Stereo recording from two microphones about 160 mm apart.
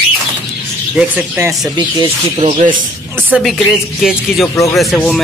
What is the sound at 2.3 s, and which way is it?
Speech, 35° right (ahead or behind).